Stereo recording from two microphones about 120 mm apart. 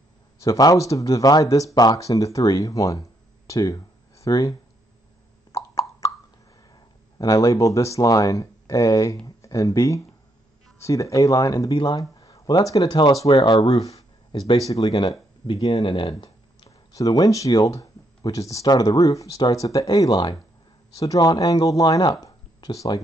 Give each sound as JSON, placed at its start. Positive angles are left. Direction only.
{"t": 0.4, "sound": "speech", "side_deg": 30}
{"t": 5.5, "sound": "plop", "side_deg": 25}
{"t": 6.7, "sound": "speech", "side_deg": 30}